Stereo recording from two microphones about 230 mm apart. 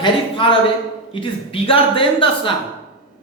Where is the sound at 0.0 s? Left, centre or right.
Left.